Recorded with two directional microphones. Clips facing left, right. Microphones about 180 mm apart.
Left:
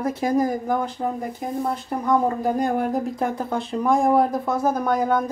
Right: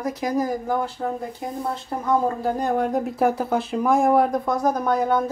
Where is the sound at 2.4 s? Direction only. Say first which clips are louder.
Left 1 dB; 10° left (ahead or behind).